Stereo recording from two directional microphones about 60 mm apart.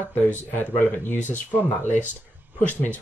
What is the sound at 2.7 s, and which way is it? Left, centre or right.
Speech, left.